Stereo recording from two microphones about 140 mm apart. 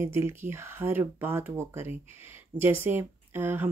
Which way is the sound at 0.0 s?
15° right (ahead or behind).